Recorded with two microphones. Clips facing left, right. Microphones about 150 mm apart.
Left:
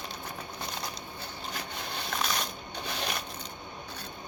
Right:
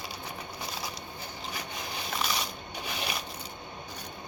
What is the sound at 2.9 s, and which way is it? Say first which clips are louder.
Crushing: left 1 dB; 10° right (ahead or behind).